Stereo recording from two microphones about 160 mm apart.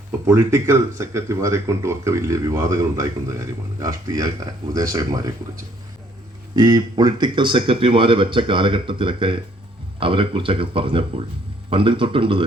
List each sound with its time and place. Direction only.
0.3 s speech: 15° right (ahead or behind)
6.6 s speech: 25° right (ahead or behind)